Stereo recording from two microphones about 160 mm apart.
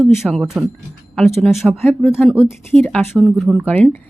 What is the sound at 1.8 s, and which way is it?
Speech, 15° left (ahead or behind).